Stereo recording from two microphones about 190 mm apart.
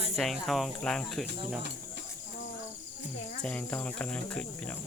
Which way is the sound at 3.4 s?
5° left (ahead or behind).